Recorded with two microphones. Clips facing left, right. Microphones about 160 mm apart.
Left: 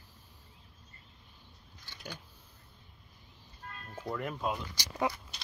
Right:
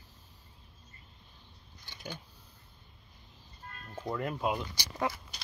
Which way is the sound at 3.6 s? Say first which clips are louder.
Left 2 dB; 70° left (ahead or behind).